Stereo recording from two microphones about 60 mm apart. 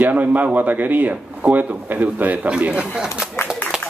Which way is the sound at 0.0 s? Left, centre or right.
Right.